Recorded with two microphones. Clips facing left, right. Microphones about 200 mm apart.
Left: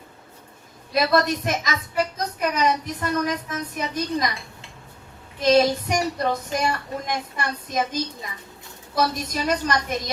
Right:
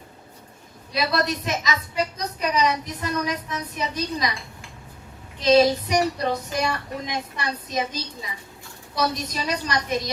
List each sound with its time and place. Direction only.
0.9 s speech: 50° left (ahead or behind)
5.4 s speech: 50° left (ahead or behind)